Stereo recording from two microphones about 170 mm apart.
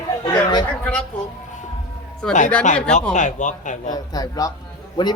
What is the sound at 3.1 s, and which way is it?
Speech, 45° left (ahead or behind).